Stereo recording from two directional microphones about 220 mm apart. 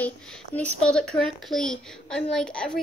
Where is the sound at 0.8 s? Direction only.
5° left (ahead or behind).